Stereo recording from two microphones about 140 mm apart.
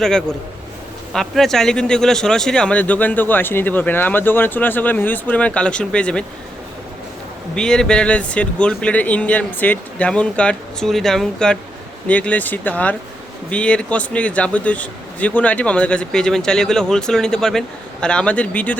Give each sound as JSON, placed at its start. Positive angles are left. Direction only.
{"t": 0.0, "sound": "a man's voice", "side_deg": 5}
{"t": 7.5, "sound": "speech", "side_deg": 5}